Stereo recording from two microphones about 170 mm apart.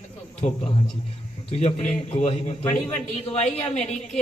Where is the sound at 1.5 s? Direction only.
40° left (ahead or behind).